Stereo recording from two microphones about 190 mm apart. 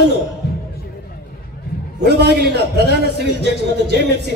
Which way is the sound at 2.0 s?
60° right (ahead or behind).